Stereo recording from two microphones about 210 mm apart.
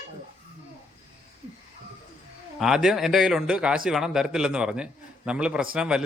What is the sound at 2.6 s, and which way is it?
A man's voice, centre (ahead or behind).